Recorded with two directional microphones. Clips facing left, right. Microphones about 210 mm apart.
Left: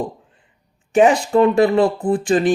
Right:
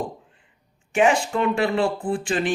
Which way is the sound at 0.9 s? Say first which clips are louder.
Left 6 dB; 40° left (ahead or behind).